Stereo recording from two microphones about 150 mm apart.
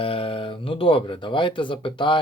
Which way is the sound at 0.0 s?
35° left (ahead or behind).